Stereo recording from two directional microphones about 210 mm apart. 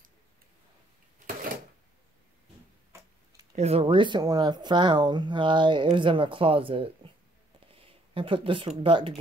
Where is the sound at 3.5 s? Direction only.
30° right (ahead or behind).